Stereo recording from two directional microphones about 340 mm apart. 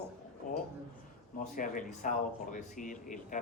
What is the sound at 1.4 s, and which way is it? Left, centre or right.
Speech, left.